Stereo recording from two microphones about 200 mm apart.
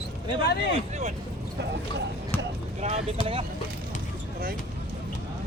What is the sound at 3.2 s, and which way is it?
Speech, 30° right (ahead or behind).